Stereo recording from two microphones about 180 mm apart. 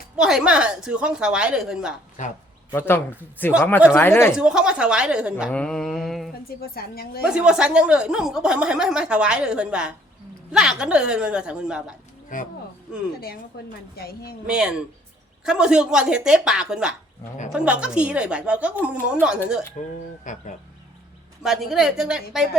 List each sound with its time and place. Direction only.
0.2 s speech: 5° right (ahead or behind)
2.7 s speech: 10° left (ahead or behind)
4.4 s speech: 5° right (ahead or behind)
5.5 s speech: 5° left (ahead or behind)
6.6 s a woman's voice: 60° left (ahead or behind)
7.3 s speech: 5° right (ahead or behind)
12.3 s speech: 45° left (ahead or behind)
14.0 s a woman's voice: 60° left (ahead or behind)
14.4 s a woman's voice: 5° right (ahead or behind)
20.2 s speech: 45° left (ahead or behind)
21.4 s speech: centre (ahead or behind)